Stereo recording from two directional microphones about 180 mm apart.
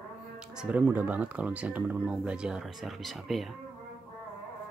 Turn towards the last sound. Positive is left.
turn(degrees=0)  # may be behind; listen again after turning